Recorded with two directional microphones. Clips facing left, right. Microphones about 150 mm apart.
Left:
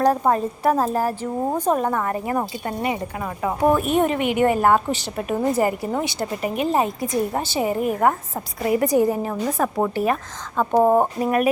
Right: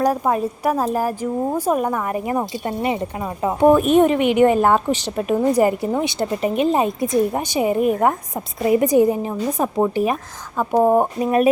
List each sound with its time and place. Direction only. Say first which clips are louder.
0.0 s a woman's voice: even; 10° right (ahead or behind)
5.3 s a woman's voice: right 4 dB; centre (ahead or behind)
5.5 s a woman's voice: right 4 dB; 20° right (ahead or behind)
11.2 s a woman's voice: right 3 dB; 25° right (ahead or behind)